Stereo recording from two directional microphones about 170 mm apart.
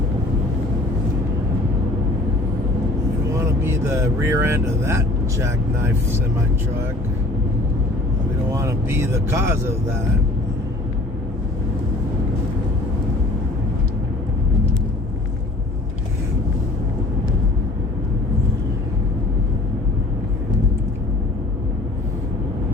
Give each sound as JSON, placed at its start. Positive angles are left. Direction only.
{"t": 3.3, "sound": "speech", "side_deg": -15}
{"t": 8.5, "sound": "speech", "side_deg": -15}